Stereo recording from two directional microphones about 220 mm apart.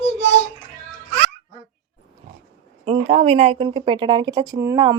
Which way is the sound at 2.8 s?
25° right (ahead or behind).